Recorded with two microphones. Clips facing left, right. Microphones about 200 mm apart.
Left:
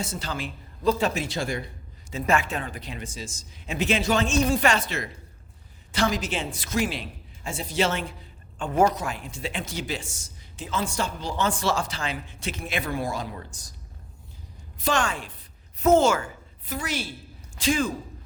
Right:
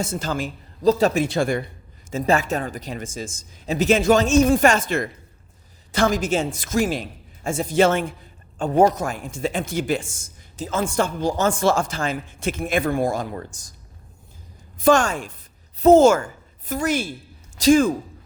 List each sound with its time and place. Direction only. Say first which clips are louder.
0.0 s speech: right 6 dB; 50° right (ahead or behind)
1.1 s speech: right 8 dB; 55° right (ahead or behind)
2.2 s speech: right 4 dB; 40° right (ahead or behind)
8.5 s a woman's voice: right 5 dB; 35° right (ahead or behind)
9.0 s speech: right 6 dB; 45° right (ahead or behind)
14.8 s speech: right 8 dB; 45° right (ahead or behind)
15.8 s speech: right 6 dB; 35° right (ahead or behind)
16.0 s a woman's voice: right 7 dB; 45° right (ahead or behind)